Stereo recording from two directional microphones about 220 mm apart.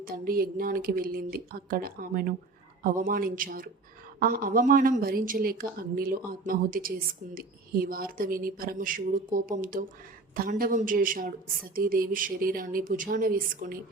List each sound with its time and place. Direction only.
0.0 s a woman's voice: 40° right (ahead or behind)